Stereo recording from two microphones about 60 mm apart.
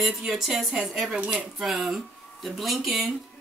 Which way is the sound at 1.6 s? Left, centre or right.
Centre.